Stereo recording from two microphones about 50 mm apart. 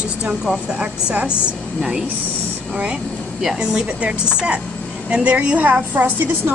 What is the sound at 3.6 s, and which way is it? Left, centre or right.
Speech, centre.